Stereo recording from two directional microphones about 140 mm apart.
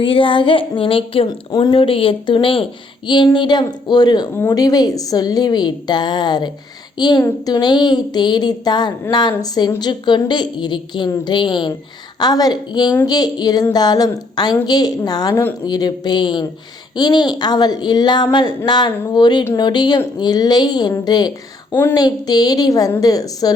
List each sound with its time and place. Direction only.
0.0 s a woman's voice: 40° left (ahead or behind)
1.3 s a woman's voice: 30° left (ahead or behind)
21.7 s a woman's voice: 15° left (ahead or behind)
21.9 s a woman's voice: 30° left (ahead or behind)